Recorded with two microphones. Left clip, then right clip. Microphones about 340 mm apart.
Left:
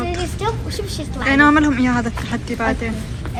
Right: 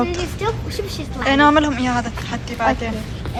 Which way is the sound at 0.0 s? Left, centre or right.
Centre.